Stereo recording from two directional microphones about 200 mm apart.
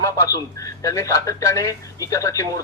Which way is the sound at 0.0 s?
15° left (ahead or behind).